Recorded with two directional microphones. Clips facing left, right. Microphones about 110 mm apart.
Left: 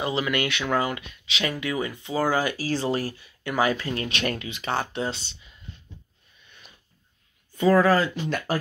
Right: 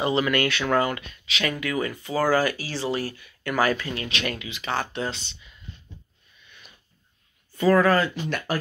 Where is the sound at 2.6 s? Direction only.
40° left (ahead or behind).